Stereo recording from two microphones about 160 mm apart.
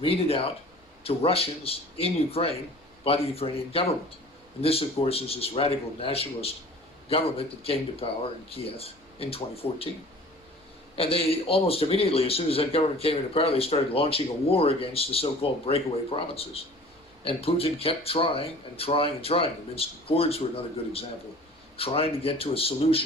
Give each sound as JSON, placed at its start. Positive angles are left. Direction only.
{"t": 0.0, "sound": "speech", "side_deg": 35}
{"t": 10.9, "sound": "speech", "side_deg": 35}